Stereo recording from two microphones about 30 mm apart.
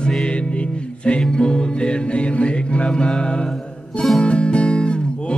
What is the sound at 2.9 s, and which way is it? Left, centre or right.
Music, left.